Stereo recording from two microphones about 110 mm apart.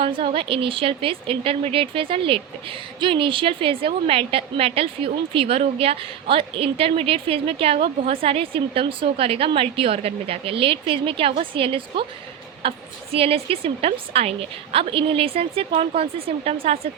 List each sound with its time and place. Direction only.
0.0 s a woman's voice: 55° right (ahead or behind)